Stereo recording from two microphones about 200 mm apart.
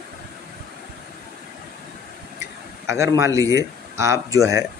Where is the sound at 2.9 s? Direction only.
15° right (ahead or behind).